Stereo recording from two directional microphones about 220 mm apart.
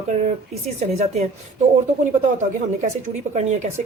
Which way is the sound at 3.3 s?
30° right (ahead or behind).